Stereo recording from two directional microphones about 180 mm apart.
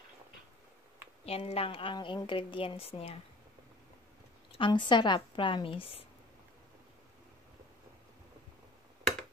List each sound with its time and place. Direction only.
1.2 s a woman's voice: 35° left (ahead or behind)
4.5 s speech: 25° left (ahead or behind)